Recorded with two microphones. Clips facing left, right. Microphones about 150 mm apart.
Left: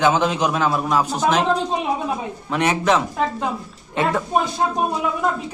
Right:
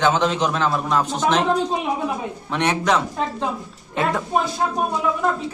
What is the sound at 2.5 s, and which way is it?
Speech, 5° left (ahead or behind).